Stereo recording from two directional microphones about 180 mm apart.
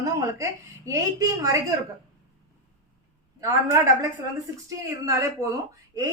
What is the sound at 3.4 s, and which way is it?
A woman's voice, 15° right (ahead or behind).